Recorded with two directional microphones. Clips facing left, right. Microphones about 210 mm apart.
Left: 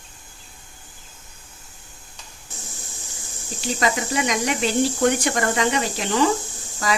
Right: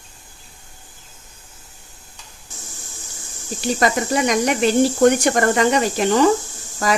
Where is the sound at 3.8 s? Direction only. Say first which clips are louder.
Right 4 dB; 45° right (ahead or behind).